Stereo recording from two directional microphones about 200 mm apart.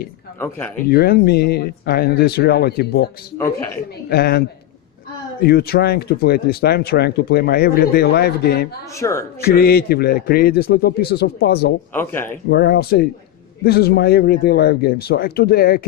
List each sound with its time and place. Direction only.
0.3 s speech: 10° left (ahead or behind)
0.9 s speech: 50° left (ahead or behind)
3.3 s speech: 15° left (ahead or behind)
4.1 s speech: 50° left (ahead or behind)
9.0 s speech: 15° left (ahead or behind)
9.4 s speech: 50° left (ahead or behind)
11.9 s speech: 10° left (ahead or behind)
12.5 s speech: 55° left (ahead or behind)